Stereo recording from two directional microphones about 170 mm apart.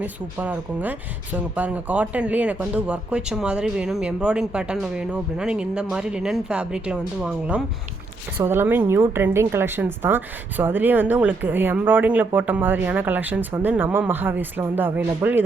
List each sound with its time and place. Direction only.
0.0 s a woman's voice: 10° right (ahead or behind)